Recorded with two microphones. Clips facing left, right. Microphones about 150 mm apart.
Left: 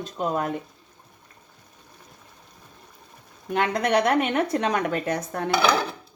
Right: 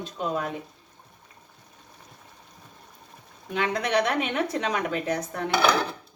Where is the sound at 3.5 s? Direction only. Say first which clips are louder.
Left 3 dB; 45° left (ahead or behind).